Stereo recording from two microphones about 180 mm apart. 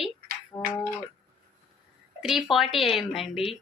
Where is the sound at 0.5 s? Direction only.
10° left (ahead or behind).